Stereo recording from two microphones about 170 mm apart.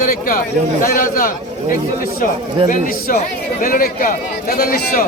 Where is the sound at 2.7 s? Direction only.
55° left (ahead or behind).